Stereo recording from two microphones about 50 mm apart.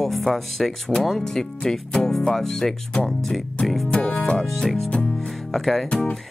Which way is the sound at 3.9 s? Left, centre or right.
Left.